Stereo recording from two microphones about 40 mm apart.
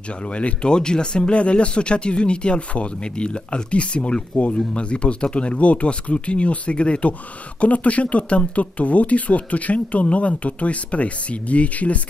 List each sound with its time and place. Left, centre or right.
0.3 s speech: left